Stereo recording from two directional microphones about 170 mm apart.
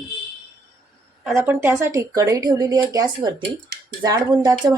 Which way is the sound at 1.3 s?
15° right (ahead or behind).